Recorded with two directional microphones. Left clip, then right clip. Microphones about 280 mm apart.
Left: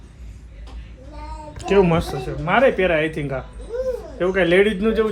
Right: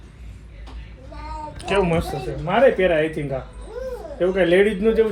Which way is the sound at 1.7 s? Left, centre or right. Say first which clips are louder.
Left 3 dB; left.